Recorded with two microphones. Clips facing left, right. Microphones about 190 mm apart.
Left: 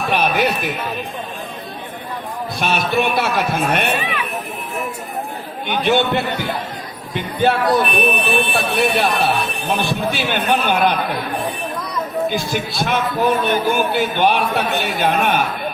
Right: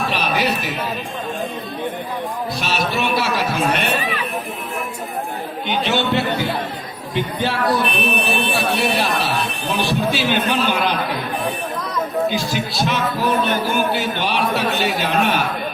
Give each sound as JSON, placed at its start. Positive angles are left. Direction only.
{"t": 0.1, "sound": "speech", "side_deg": 55}
{"t": 2.6, "sound": "a man's voice", "side_deg": 55}
{"t": 3.9, "sound": "a sound", "side_deg": -40}
{"t": 5.6, "sound": "a man's voice", "side_deg": 55}
{"t": 12.3, "sound": "a man's voice", "side_deg": 55}